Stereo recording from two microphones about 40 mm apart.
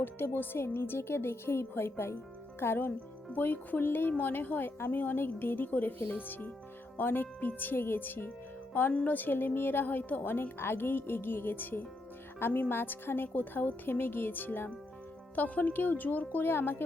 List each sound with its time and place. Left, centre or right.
0.0 s a woman's voice: left
3.3 s a woman's voice: left
15.4 s speech: left
16.4 s a woman's voice: left